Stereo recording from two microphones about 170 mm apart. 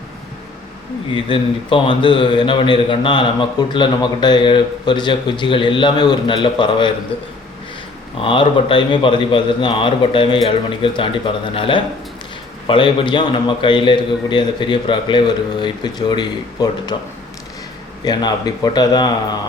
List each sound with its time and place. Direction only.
1.1 s a man's voice: 30° left (ahead or behind)
8.2 s a man's voice: 30° left (ahead or behind)
18.0 s a man's voice: 25° left (ahead or behind)